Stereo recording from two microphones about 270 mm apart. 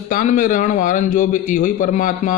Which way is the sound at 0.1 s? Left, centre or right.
Left.